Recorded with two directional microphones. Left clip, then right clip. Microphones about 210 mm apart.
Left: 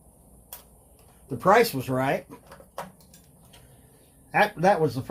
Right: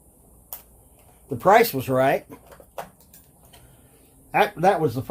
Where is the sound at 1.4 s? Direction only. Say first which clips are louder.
Right 3 dB; 40° right (ahead or behind).